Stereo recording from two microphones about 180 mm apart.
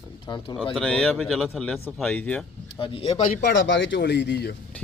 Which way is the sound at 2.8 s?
30° left (ahead or behind).